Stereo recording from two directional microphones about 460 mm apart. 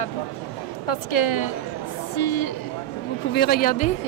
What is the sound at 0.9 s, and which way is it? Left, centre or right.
Speech, left.